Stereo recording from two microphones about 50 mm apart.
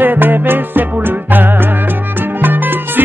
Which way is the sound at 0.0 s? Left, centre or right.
Right.